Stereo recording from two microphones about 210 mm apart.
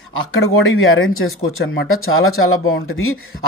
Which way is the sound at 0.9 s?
80° left.